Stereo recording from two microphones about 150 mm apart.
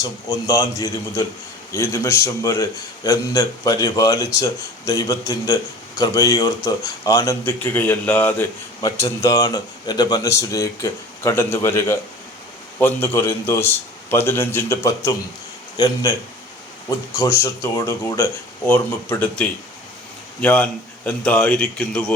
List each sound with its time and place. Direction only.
0.0 s a man's voice: 25° left (ahead or behind)
7.6 s speech: 10° left (ahead or behind)
8.8 s a man's voice: 25° left (ahead or behind)
17.4 s speech: 20° left (ahead or behind)